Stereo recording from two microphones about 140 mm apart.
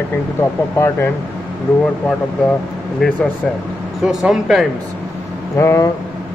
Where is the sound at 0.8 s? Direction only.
20° left (ahead or behind).